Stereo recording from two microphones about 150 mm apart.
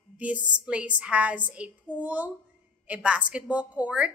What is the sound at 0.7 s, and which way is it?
A woman's voice, 10° right (ahead or behind).